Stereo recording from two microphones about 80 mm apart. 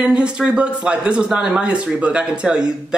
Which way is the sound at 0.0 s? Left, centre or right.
Centre.